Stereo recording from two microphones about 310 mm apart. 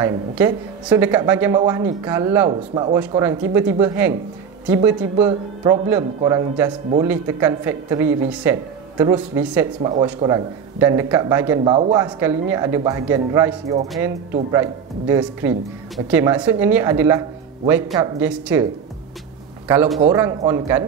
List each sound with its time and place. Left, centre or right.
0.0 s speech: centre
19.7 s speech: centre